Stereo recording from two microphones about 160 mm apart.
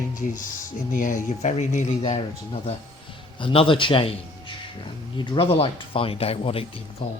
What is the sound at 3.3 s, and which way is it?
A man's voice, 35° left (ahead or behind).